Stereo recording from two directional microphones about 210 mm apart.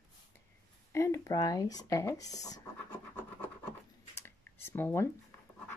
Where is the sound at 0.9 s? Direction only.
15° left (ahead or behind).